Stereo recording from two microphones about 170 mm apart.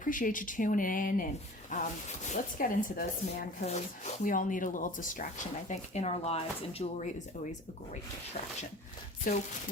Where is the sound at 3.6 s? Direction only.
40° left (ahead or behind).